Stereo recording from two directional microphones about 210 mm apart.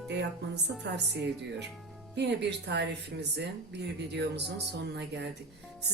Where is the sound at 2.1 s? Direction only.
55° right (ahead or behind).